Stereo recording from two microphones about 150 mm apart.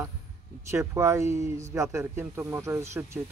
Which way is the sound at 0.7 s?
20° right (ahead or behind).